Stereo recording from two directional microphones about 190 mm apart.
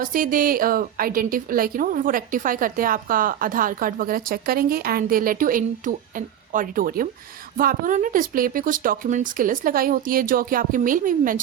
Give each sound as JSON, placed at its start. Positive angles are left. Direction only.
{"t": 0.0, "sound": "a woman's voice", "side_deg": -45}